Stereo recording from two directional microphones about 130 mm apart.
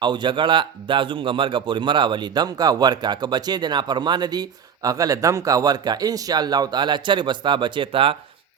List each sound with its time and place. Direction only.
0.0 s speech: 35° right (ahead or behind)